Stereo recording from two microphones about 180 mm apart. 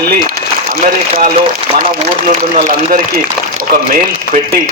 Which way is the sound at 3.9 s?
55° right (ahead or behind).